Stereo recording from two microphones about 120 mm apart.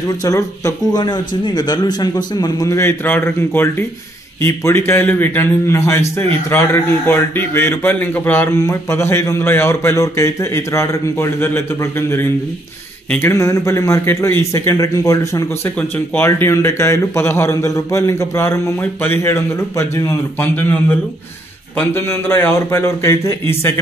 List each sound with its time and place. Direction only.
0.2 s a man's voice: 25° left (ahead or behind)
21.7 s a man's voice: 20° left (ahead or behind)